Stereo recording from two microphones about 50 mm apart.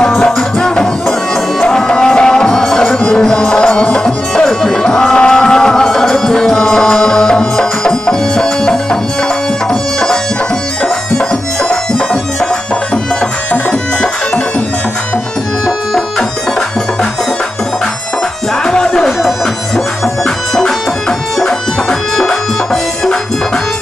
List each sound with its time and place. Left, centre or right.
0.2 s music: centre
11.7 s music: centre
15.6 s music: centre
18.6 s music: centre
20.2 s music: centre
22.1 s music: centre